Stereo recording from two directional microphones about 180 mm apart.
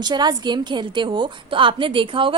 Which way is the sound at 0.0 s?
25° right (ahead or behind).